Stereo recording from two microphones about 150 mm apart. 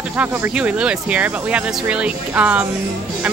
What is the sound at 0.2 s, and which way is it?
Speech, 10° right (ahead or behind).